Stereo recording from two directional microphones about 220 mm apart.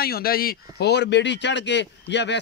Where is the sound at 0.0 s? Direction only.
45° left (ahead or behind).